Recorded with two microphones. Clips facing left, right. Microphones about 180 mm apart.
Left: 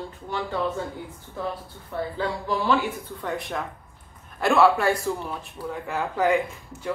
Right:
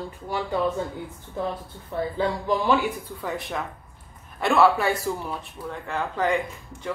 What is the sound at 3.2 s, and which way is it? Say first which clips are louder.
Speech: left 1 dB; centre (ahead or behind).